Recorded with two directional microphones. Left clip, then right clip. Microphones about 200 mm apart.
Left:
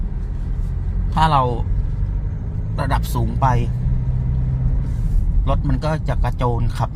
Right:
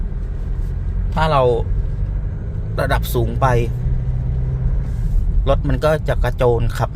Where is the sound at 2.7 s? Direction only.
20° right (ahead or behind).